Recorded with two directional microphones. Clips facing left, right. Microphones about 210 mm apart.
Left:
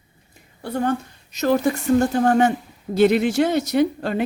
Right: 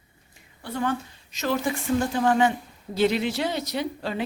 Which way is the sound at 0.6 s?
45° left (ahead or behind).